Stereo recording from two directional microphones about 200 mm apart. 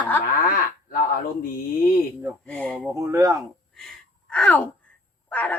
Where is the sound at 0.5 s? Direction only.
45° left (ahead or behind).